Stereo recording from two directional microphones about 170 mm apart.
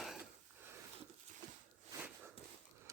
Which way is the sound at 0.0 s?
Centre (ahead or behind).